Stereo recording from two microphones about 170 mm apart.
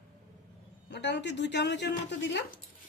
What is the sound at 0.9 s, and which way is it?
Speech, 90° left.